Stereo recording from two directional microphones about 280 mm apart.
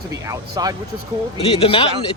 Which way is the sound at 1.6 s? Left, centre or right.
Centre.